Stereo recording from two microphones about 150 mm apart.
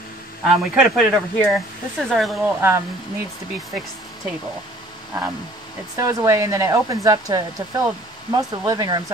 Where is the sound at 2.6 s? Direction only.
15° right (ahead or behind).